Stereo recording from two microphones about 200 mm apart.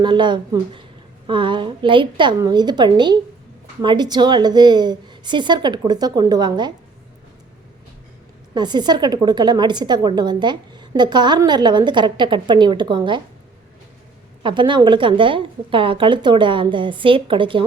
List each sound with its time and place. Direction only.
0.0 s a woman's voice: 25° right (ahead or behind)
8.5 s a woman's voice: 20° right (ahead or behind)
14.4 s a woman's voice: 25° right (ahead or behind)